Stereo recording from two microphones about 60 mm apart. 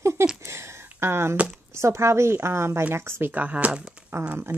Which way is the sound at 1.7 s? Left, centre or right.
Right.